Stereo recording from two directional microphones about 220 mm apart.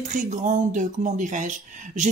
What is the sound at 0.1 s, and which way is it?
Speech, 35° right (ahead or behind).